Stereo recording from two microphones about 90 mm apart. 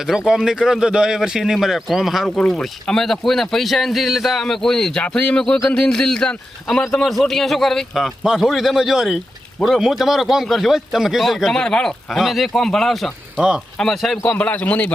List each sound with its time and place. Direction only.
0.1 s speech: 5° right (ahead or behind)
14.3 s a man's voice: 15° left (ahead or behind)